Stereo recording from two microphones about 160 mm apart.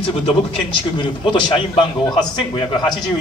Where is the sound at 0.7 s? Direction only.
30° left (ahead or behind).